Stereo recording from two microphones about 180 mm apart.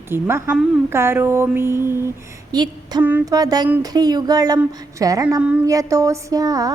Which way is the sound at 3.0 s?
15° right (ahead or behind).